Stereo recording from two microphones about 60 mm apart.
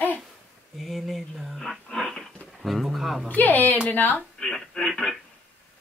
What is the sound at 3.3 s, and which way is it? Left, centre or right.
Speech, left.